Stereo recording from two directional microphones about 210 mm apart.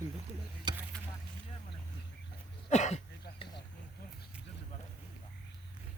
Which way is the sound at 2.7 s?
35° left (ahead or behind).